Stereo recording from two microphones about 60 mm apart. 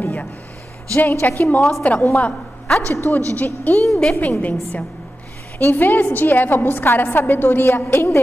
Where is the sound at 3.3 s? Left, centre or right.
Left.